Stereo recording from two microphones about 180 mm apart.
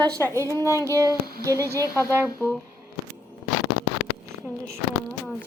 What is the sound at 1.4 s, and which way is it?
Speech, 15° right (ahead or behind).